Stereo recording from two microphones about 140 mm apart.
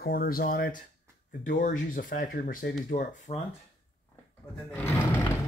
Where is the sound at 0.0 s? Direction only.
90° left.